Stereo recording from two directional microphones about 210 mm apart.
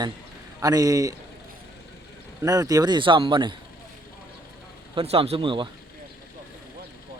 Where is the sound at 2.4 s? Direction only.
15° right (ahead or behind).